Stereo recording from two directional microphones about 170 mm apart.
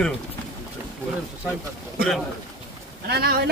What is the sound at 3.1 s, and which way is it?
Speech, 70° right (ahead or behind).